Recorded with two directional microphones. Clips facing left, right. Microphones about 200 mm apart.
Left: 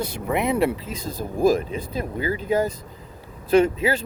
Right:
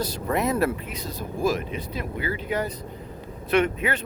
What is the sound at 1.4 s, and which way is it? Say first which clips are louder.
Speech: left 6 dB; 30° left (ahead or behind).